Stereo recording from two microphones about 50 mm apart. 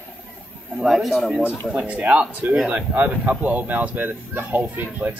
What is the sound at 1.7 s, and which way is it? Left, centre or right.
Speech, right.